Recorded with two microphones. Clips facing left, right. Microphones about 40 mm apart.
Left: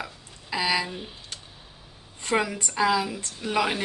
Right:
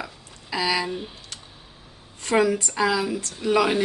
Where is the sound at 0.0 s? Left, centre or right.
Centre.